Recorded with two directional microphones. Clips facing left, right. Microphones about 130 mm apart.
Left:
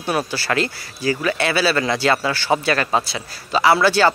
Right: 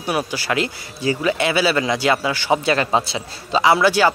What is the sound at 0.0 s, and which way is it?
Speech, 15° right (ahead or behind).